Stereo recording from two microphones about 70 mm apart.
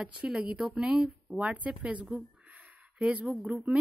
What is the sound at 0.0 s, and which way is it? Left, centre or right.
A woman's voice, centre.